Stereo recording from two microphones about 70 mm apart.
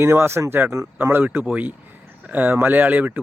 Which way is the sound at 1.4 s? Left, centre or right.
Right.